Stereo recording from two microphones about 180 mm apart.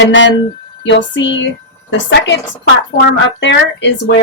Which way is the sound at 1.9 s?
80° left.